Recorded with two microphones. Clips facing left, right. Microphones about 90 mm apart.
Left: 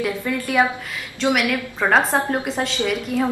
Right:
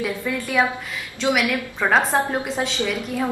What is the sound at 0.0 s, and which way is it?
A woman's voice, centre (ahead or behind).